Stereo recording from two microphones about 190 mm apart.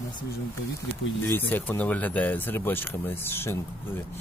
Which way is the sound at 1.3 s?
10° left (ahead or behind).